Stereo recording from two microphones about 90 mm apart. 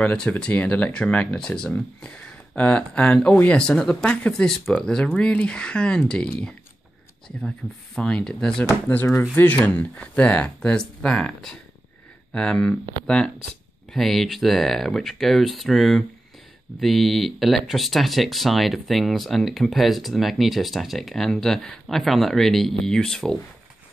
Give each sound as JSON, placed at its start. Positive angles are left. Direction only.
{"t": 0.0, "sound": "speech", "side_deg": 15}
{"t": 8.6, "sound": "speech", "side_deg": 20}